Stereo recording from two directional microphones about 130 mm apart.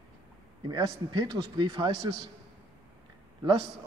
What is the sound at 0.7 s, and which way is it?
Speech, 35° right (ahead or behind).